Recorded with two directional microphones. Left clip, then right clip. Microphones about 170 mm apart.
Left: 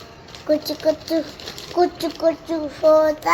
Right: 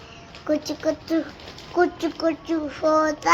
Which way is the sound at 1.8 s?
65° right (ahead or behind).